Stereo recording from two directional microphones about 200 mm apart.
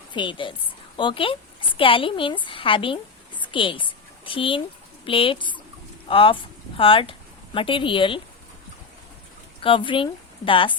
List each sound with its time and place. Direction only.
0.1 s a woman's voice: 25° left (ahead or behind)
9.6 s a woman's voice: 25° left (ahead or behind)